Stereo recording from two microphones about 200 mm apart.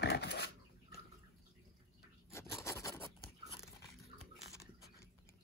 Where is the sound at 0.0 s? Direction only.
55° left (ahead or behind).